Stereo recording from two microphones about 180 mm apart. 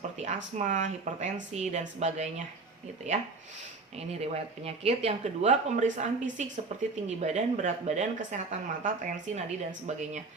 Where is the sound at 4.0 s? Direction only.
35° right (ahead or behind).